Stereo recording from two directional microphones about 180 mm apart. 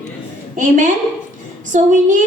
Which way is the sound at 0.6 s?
45° right (ahead or behind).